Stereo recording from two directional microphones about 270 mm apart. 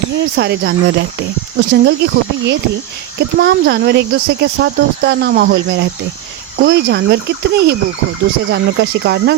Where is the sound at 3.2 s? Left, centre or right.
Right.